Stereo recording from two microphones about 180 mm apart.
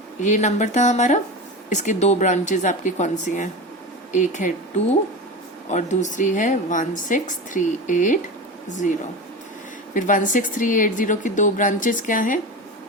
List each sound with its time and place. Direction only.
0.2 s a woman's voice: 40° left (ahead or behind)
5.6 s a woman's voice: 40° left (ahead or behind)
9.9 s a woman's voice: 45° left (ahead or behind)